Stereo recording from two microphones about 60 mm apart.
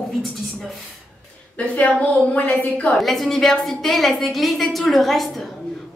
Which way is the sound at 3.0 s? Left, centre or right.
Centre.